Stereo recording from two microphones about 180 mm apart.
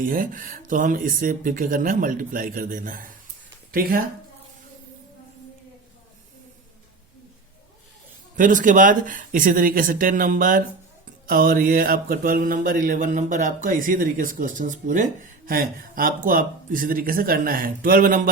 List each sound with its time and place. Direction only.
0.0 s mantra: 50° right (ahead or behind)
3.7 s speech: 55° right (ahead or behind)
8.4 s mantra: 45° right (ahead or behind)